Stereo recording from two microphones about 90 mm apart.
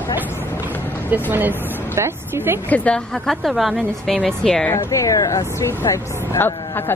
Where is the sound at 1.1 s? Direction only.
20° right (ahead or behind).